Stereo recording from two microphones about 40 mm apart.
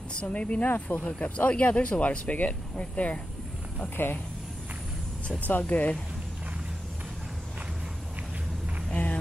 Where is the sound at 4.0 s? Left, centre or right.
Left.